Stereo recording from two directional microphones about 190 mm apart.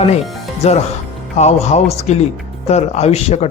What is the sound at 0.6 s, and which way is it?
A man's voice, 35° left (ahead or behind).